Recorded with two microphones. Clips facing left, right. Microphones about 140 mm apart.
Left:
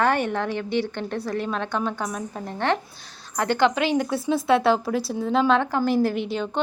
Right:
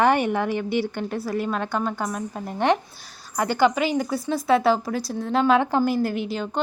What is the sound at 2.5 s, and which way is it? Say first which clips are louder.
Speech: right 3 dB; 15° right (ahead or behind).